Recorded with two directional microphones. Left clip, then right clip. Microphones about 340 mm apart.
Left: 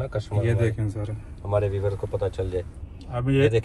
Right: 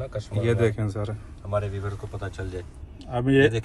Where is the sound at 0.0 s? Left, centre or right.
Centre.